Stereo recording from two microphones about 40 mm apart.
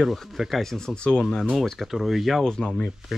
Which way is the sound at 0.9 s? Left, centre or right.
Left.